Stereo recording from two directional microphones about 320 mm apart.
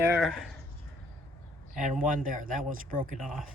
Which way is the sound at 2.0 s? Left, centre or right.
Right.